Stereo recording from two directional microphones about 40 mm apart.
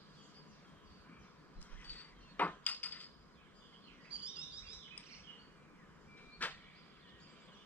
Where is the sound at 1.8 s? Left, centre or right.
Left.